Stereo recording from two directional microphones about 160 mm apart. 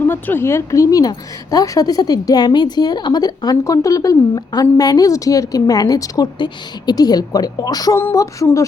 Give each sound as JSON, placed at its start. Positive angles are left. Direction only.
{"t": 0.0, "sound": "a woman's voice", "side_deg": 15}